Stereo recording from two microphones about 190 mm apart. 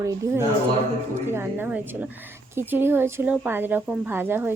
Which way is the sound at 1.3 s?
10° right (ahead or behind).